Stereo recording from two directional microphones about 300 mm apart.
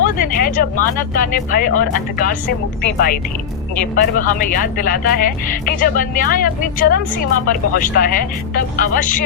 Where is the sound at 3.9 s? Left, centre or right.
Left.